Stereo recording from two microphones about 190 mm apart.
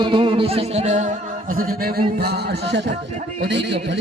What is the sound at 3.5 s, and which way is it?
Speech, 65° right (ahead or behind).